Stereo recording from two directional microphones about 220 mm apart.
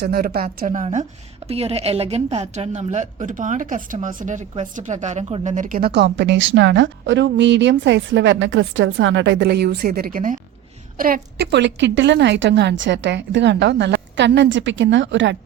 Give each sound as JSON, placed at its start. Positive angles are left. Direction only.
{"t": 0.0, "sound": "a woman's voice", "side_deg": -45}